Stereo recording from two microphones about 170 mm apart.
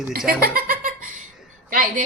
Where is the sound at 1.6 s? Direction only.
55° right (ahead or behind).